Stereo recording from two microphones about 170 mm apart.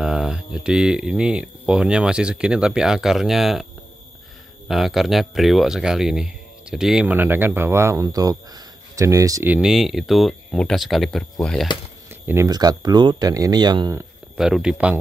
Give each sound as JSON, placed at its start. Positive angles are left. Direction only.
{"t": 0.0, "sound": "speech", "side_deg": -5}
{"t": 4.6, "sound": "speech", "side_deg": 0}
{"t": 9.5, "sound": "speech", "side_deg": -5}
{"t": 12.1, "sound": "a sound", "side_deg": -10}
{"t": 12.4, "sound": "speech", "side_deg": -25}
{"t": 14.3, "sound": "speech", "side_deg": -5}